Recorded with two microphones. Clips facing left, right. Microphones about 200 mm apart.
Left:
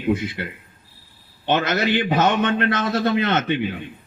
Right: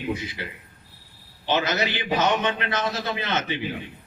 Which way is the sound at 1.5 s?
55° left (ahead or behind).